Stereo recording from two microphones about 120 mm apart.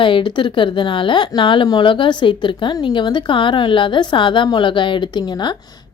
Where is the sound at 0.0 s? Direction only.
45° left (ahead or behind).